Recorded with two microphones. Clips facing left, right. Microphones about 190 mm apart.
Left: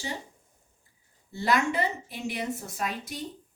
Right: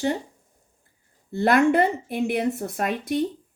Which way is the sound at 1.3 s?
55° right (ahead or behind).